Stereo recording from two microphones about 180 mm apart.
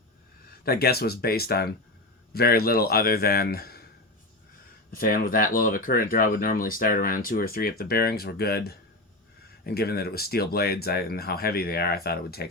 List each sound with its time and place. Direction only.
0.6 s speech: 60° left (ahead or behind)
4.9 s speech: 55° left (ahead or behind)